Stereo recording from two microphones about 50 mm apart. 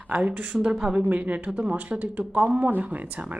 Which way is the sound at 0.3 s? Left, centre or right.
Right.